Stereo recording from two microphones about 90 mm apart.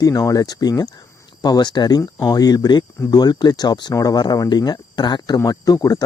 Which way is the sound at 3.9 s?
40° left (ahead or behind).